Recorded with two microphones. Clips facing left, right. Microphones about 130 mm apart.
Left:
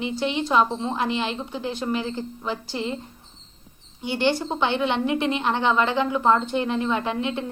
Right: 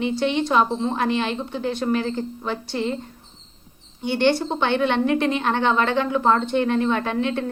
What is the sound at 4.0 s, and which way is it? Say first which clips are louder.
A woman's voice: right 3 dB; 10° left (ahead or behind).